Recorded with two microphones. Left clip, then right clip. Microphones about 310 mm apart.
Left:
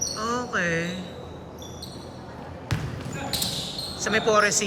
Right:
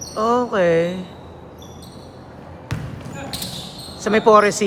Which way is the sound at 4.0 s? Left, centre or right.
Centre.